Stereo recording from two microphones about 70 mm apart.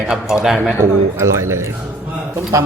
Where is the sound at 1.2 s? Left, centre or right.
Right.